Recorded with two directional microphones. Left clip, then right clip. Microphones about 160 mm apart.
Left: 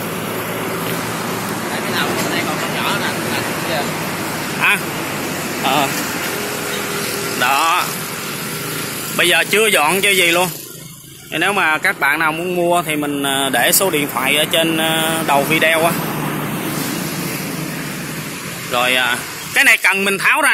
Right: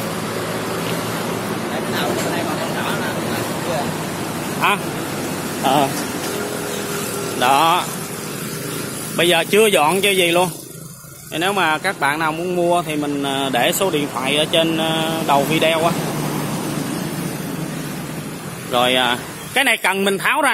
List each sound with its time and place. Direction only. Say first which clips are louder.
5.6 s a sound: even; 35° right (ahead or behind)
7.3 s vehicle: right 1 dB; 15° right (ahead or behind)
9.1 s speech: left 1 dB; 10° right (ahead or behind)
18.7 s speech: left 1 dB; 15° right (ahead or behind)